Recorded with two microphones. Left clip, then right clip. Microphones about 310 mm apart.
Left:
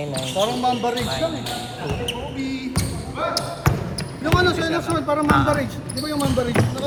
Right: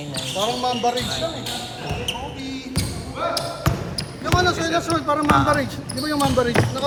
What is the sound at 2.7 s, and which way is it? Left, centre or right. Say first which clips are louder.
Basketball bounce: left 1 dB; centre.